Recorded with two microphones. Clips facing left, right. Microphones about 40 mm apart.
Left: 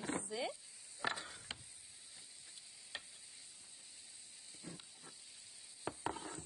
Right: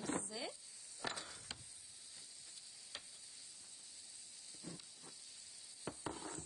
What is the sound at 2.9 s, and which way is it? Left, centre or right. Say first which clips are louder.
Tick-tock: left 4 dB; left.